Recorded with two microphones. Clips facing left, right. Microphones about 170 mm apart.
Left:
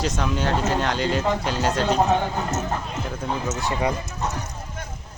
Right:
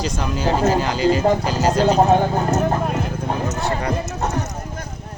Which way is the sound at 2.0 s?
45° right (ahead or behind).